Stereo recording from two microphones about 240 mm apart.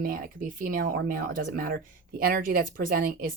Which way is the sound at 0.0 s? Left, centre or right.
Right.